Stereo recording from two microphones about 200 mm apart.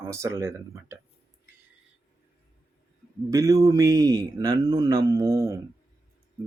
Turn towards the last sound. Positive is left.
turn(degrees=-15)  # may be behind; listen again after turning